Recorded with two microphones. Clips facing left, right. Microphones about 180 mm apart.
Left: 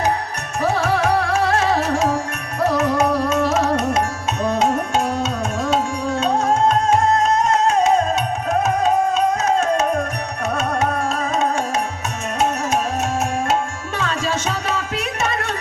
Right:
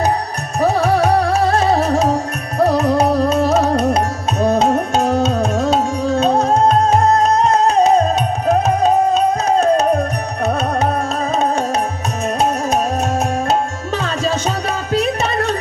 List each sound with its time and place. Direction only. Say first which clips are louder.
0.6 s music: right 4 dB; 40° right (ahead or behind)
12.4 s music: right 2 dB; 35° right (ahead or behind)